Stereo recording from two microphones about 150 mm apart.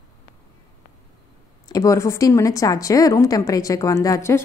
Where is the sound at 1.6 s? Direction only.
25° left (ahead or behind).